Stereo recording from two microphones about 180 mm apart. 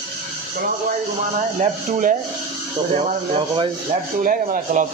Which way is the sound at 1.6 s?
45° right (ahead or behind).